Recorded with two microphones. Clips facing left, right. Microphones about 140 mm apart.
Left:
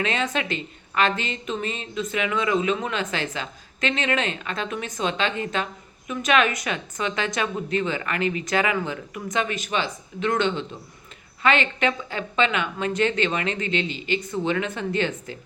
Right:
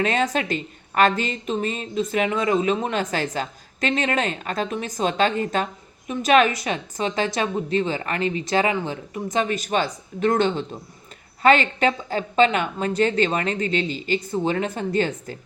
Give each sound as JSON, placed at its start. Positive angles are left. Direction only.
{"t": 0.0, "sound": "speech", "side_deg": -40}